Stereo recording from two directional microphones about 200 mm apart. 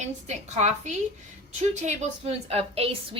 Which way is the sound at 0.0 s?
35° right (ahead or behind).